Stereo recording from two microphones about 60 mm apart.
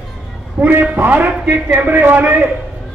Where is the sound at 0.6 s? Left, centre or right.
Right.